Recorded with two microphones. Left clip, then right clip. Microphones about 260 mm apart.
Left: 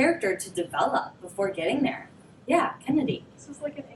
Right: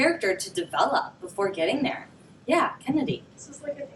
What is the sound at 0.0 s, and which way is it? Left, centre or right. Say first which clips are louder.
A woman's voice: right 1 dB; centre.